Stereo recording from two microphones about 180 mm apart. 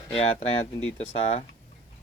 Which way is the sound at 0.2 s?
35° left (ahead or behind).